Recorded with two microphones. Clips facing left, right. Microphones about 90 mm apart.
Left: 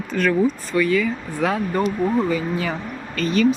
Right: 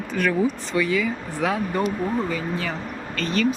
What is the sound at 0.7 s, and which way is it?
Speech, 15° right (ahead or behind).